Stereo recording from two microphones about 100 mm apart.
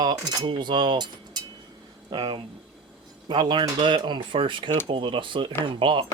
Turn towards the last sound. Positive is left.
turn(degrees=-60)  # may be behind; listen again after turning